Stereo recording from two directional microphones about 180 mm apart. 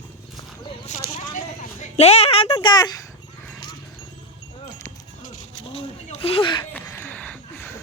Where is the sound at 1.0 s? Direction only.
45° left (ahead or behind); by 3.1 s 20° left (ahead or behind).